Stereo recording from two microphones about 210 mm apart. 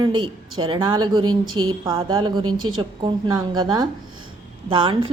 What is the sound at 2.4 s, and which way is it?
Speech, 90° right.